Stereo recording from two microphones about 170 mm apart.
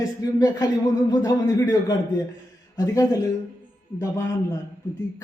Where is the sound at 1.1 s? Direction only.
20° left (ahead or behind).